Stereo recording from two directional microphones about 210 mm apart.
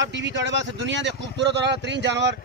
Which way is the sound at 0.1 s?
60° right (ahead or behind).